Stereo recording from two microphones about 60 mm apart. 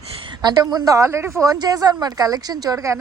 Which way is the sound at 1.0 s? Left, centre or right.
Right.